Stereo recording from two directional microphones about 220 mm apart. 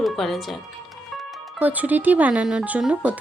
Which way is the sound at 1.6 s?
5° right (ahead or behind).